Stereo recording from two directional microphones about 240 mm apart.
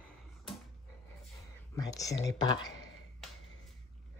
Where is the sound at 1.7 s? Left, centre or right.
Centre.